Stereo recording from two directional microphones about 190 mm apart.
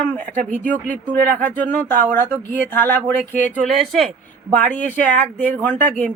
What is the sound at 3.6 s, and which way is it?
Speech, centre (ahead or behind).